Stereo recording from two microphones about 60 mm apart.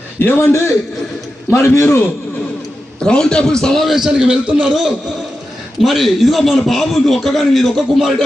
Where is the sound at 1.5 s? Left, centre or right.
Left.